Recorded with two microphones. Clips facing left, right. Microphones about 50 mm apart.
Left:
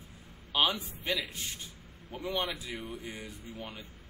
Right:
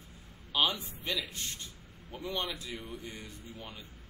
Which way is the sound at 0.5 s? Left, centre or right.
Centre.